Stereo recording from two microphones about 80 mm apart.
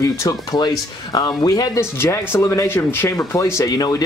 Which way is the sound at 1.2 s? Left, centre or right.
Left.